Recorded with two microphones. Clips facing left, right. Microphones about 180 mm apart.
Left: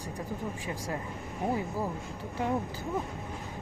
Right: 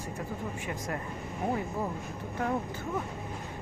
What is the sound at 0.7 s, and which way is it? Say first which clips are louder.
Speech: even; 25° left (ahead or behind).